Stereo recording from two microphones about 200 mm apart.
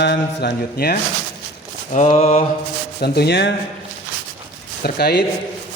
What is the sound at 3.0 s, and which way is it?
Speech, 55° left (ahead or behind).